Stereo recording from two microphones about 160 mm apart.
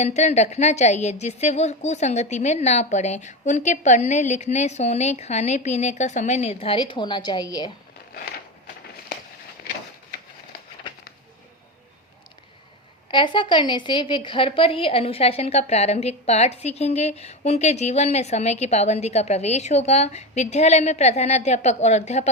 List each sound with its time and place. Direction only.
0.0 s a woman's voice: 45° left (ahead or behind); by 7.7 s 25° left (ahead or behind)
13.1 s a woman's voice: 30° left (ahead or behind); by 22.3 s 45° left (ahead or behind)